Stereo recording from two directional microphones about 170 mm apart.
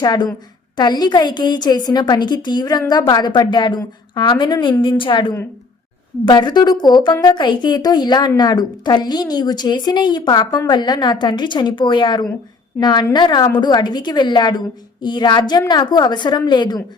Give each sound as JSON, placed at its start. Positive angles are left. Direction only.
{"t": 0.0, "sound": "a woman's voice", "side_deg": 25}